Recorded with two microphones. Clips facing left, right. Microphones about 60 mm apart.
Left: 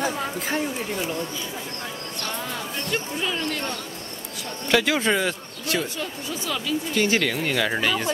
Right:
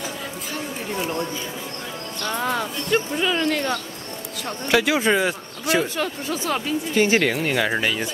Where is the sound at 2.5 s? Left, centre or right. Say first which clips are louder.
Right 8 dB; right.